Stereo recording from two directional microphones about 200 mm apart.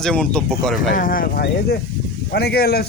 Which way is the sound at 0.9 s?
45° left (ahead or behind).